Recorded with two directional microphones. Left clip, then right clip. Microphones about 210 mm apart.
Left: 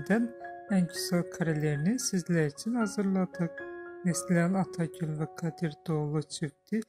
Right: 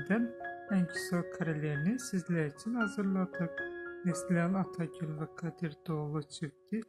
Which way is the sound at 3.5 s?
Centre (ahead or behind).